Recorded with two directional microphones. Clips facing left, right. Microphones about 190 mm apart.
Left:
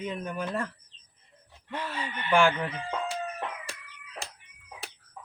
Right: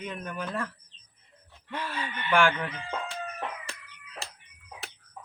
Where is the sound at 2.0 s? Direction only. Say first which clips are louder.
Left 1 dB; 20° left (ahead or behind).